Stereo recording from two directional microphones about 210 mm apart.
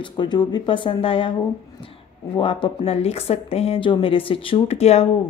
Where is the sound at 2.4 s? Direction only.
25° left (ahead or behind).